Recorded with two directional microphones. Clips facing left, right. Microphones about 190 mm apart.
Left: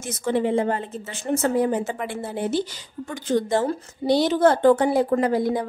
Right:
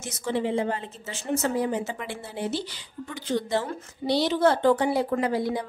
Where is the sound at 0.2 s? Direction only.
50° left (ahead or behind).